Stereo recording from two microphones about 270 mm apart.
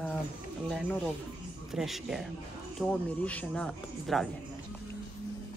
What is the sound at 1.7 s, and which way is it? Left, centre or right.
Speech, centre.